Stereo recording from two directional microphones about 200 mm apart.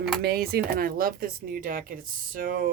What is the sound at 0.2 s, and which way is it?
Speech, 50° right (ahead or behind).